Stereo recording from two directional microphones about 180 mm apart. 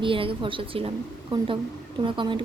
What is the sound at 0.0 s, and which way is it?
Speech, 30° right (ahead or behind).